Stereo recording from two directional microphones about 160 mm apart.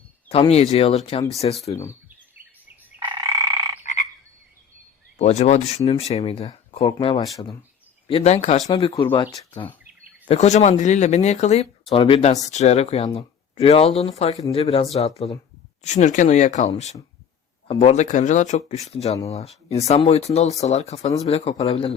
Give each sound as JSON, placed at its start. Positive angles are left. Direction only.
{"t": 0.3, "sound": "speech", "side_deg": 40}
{"t": 1.7, "sound": "speech", "side_deg": 20}
{"t": 3.0, "sound": "frog", "side_deg": -30}
{"t": 5.1, "sound": "speech", "side_deg": 45}
{"t": 9.0, "sound": "speech", "side_deg": 30}
{"t": 10.2, "sound": "speech", "side_deg": 40}